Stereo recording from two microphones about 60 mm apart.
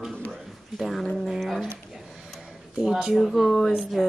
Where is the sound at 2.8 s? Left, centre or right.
Centre.